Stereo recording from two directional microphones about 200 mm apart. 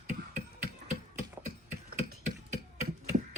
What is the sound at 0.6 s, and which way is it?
Gears, 35° right (ahead or behind).